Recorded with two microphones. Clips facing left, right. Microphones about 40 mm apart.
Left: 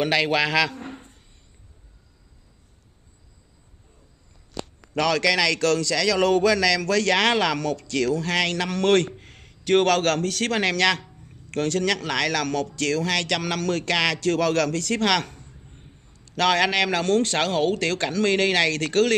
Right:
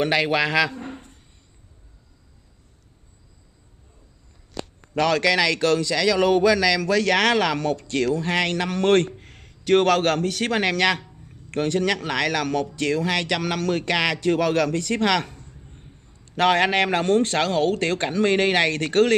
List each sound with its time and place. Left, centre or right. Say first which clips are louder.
0.1 s a man's voice: right 1 dB; centre
5.0 s speech: right 1 dB; right
9.1 s a sound: even; centre
9.8 s speech: right 1 dB; centre
15.3 s a sound: right 2 dB; centre
16.1 s a man's voice: right 2 dB; right
17.2 s speech: right 1 dB; left
17.7 s speech: right 1 dB; right